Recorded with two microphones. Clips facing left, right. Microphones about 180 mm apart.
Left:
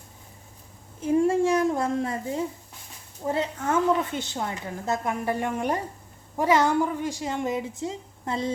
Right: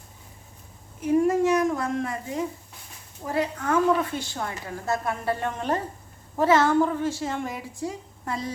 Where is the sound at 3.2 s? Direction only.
25° left (ahead or behind).